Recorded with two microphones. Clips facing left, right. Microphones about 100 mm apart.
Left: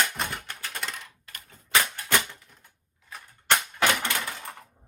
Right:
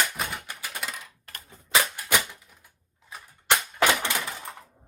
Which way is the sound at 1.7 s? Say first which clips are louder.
Even; 15° right (ahead or behind).